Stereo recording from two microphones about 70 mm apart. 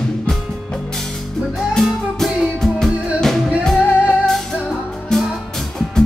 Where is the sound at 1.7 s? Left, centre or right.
Centre.